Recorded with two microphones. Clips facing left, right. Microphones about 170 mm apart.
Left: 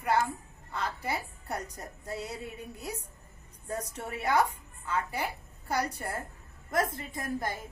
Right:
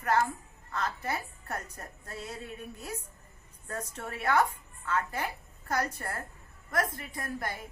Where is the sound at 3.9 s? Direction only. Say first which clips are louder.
Even; 15° left (ahead or behind).